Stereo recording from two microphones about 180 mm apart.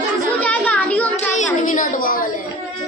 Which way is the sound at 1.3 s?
45° left (ahead or behind).